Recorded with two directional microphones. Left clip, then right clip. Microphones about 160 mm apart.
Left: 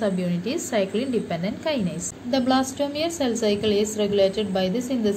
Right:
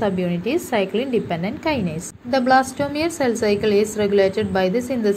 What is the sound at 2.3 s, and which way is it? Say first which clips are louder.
A woman's voice: right 6 dB; 35° right (ahead or behind).